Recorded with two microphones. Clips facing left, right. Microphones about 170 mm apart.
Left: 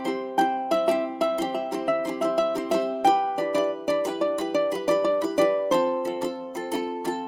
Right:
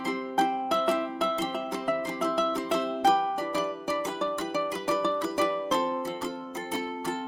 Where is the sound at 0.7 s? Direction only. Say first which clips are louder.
Left 4 dB; 15° left (ahead or behind).